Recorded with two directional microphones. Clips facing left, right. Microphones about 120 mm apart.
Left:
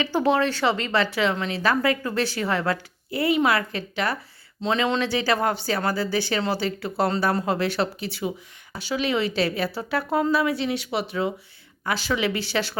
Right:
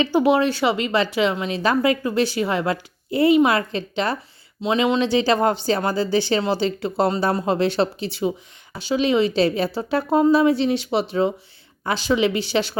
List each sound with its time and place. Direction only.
0.0 s a woman's voice: 15° right (ahead or behind)
4.6 s a woman's voice: 10° right (ahead or behind)